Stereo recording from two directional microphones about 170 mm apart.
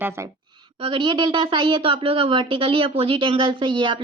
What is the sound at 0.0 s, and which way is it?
Speech, 15° right (ahead or behind).